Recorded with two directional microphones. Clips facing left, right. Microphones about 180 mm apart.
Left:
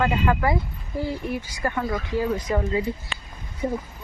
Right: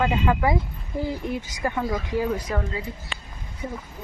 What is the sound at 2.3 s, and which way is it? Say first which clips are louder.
Speech: left 2 dB; 10° left (ahead or behind).